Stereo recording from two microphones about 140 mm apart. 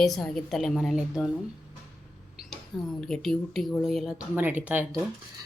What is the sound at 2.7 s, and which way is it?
Speech, centre (ahead or behind).